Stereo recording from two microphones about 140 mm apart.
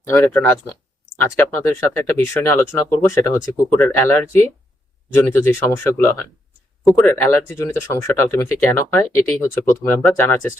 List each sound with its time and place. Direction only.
0.0 s speech: 20° left (ahead or behind)